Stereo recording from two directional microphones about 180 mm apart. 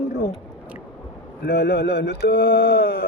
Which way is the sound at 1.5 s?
65° left (ahead or behind).